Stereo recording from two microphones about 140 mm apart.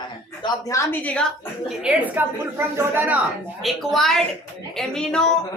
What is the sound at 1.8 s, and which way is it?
A woman's voice, 10° right (ahead or behind).